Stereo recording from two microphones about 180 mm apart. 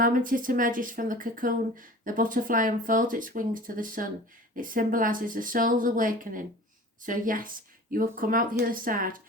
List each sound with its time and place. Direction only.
0.0 s speech: 50° right (ahead or behind)